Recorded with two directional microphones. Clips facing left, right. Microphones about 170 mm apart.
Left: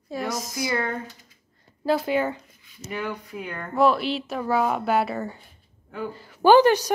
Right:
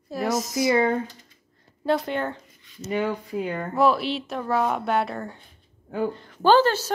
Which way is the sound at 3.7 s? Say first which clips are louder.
Left 1 dB; centre (ahead or behind).